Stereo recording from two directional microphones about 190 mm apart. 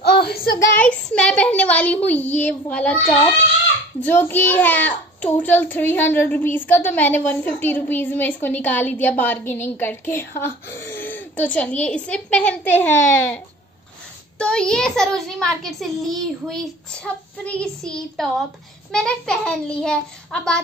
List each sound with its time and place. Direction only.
0.2 s child singing: 55° left (ahead or behind)
0.7 s a child's voice: 5° left (ahead or behind)
4.0 s a child's voice: 10° left (ahead or behind)
14.4 s a child's voice: 5° left (ahead or behind)